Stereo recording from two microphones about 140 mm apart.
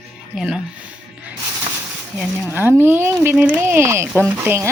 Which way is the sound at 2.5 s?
15° right (ahead or behind).